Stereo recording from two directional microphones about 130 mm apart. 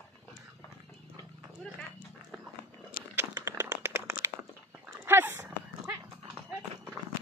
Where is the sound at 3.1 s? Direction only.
20° right (ahead or behind).